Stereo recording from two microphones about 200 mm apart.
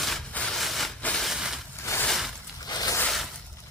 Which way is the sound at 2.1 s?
Centre (ahead or behind).